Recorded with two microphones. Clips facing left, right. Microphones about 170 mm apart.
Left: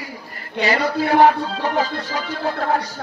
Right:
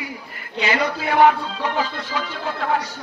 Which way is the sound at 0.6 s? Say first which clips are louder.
Left 3 dB; 40° left (ahead or behind).